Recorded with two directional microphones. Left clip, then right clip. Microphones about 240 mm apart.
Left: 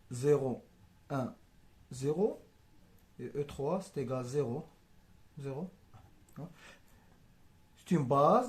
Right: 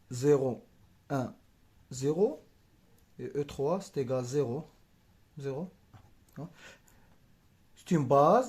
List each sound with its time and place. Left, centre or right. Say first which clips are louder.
0.1 s speech: right 3 dB; right
5.4 s a sound: right 5 dB; right
7.9 s speech: right 4 dB; right